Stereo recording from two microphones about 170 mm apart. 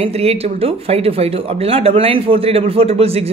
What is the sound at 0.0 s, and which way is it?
Speech, 35° right (ahead or behind).